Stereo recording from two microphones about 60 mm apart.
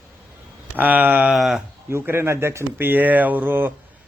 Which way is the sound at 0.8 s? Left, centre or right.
Right.